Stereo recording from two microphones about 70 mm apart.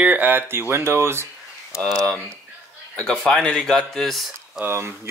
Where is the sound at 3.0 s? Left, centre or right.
Centre.